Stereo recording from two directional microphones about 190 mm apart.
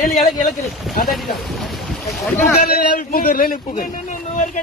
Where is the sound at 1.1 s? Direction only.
Centre (ahead or behind).